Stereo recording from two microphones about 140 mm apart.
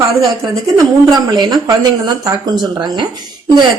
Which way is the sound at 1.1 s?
25° right (ahead or behind).